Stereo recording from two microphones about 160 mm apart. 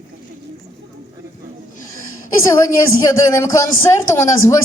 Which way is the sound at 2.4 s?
20° left (ahead or behind).